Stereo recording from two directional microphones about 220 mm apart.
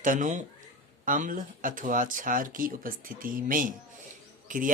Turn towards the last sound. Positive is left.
turn(degrees=-35)  # may be behind; listen again after turning